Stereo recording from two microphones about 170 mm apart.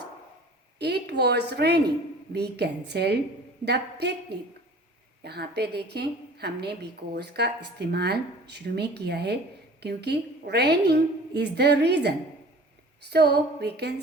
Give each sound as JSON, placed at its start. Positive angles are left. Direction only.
{"t": 0.8, "sound": "a woman's voice", "side_deg": -75}